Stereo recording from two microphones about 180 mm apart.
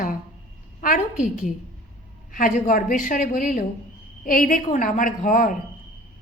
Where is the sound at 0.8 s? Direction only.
45° left (ahead or behind).